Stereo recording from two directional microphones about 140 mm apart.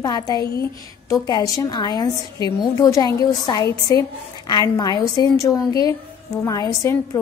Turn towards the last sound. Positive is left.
turn(degrees=25)  # may be behind; listen again after turning